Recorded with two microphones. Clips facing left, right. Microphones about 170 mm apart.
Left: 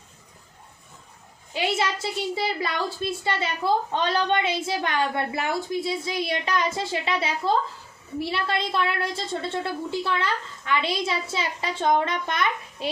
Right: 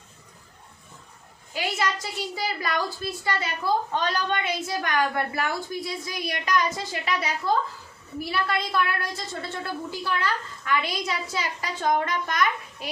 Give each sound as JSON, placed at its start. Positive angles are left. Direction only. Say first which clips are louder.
{"t": 1.5, "sound": "a woman's voice", "louder": "left 2 dB", "side_deg": 25}